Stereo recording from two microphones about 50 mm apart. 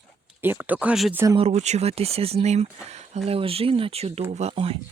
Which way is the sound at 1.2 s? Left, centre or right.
Right.